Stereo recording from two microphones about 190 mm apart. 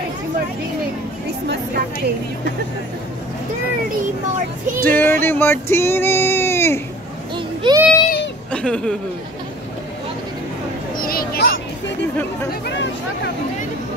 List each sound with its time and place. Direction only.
1.5 s a woman's voice: 55° right (ahead or behind)
4.8 s child singing: 10° left (ahead or behind)
7.3 s child singing: 25° right (ahead or behind)
8.5 s a sound: 5° left (ahead or behind)
11.0 s speech: 50° left (ahead or behind)